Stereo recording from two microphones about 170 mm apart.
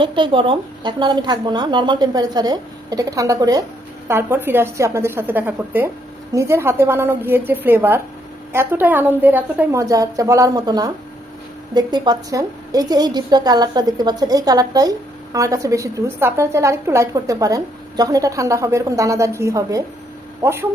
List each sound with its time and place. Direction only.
0.0 s a woman's voice: 30° right (ahead or behind); by 20.7 s 15° right (ahead or behind)